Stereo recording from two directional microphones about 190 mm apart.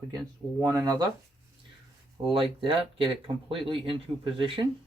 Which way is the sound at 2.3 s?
30° right (ahead or behind).